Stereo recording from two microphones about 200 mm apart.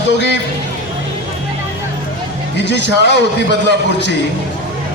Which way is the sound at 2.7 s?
60° left (ahead or behind).